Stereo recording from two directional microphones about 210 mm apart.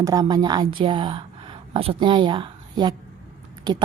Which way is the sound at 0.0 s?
15° right (ahead or behind).